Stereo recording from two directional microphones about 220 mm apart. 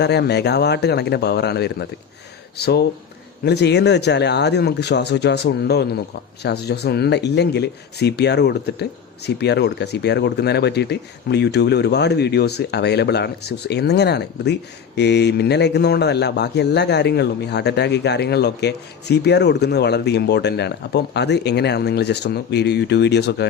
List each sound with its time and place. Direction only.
0.0 s a man's voice: 50° left (ahead or behind)